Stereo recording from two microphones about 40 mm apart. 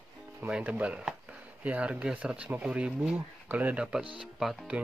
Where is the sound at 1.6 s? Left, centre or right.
Right.